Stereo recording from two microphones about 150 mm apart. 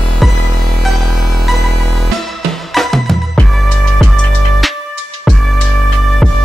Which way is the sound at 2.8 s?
Centre (ahead or behind).